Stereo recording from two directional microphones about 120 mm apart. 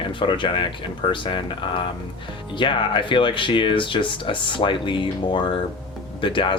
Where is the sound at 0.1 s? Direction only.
45° left (ahead or behind).